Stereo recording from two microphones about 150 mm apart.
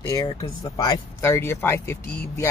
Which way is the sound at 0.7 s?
25° left (ahead or behind).